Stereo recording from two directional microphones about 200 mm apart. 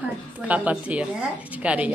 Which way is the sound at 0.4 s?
5° right (ahead or behind).